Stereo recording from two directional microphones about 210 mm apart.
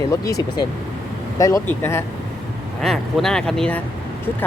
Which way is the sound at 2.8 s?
Centre (ahead or behind).